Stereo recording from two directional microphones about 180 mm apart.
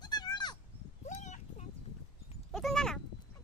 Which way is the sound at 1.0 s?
40° left (ahead or behind).